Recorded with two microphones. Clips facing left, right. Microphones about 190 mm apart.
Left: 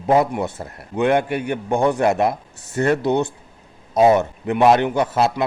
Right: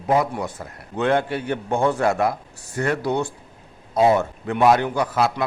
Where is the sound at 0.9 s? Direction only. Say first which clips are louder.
Left 3 dB; 15° left (ahead or behind).